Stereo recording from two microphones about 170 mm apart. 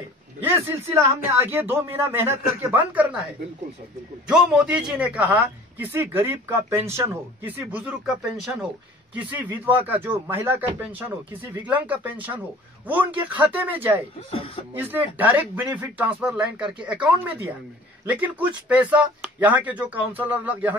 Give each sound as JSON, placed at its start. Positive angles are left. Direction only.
{"t": 0.4, "sound": "speech", "side_deg": -10}
{"t": 4.3, "sound": "speech", "side_deg": -5}
{"t": 9.8, "sound": "speech", "side_deg": -15}
{"t": 14.3, "sound": "speech", "side_deg": 30}
{"t": 14.8, "sound": "speech", "side_deg": -10}